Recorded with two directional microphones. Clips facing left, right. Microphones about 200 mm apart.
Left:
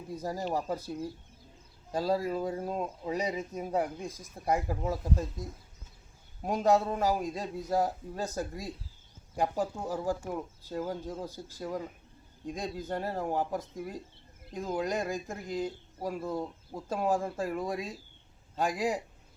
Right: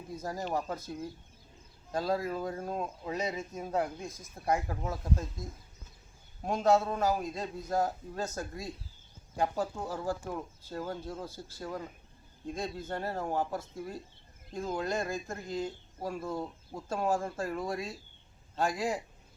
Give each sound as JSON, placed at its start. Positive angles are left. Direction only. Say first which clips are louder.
{"t": 0.1, "sound": "speech", "louder": "left 2 dB", "side_deg": 10}
{"t": 4.0, "sound": "speech", "louder": "left 2 dB", "side_deg": 35}
{"t": 4.4, "sound": "speech", "louder": "left 2 dB", "side_deg": 10}